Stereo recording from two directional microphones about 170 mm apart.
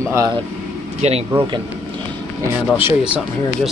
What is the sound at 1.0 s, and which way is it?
Speech, 35° right (ahead or behind).